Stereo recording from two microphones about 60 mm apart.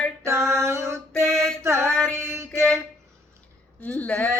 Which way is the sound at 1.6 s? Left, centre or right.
Right.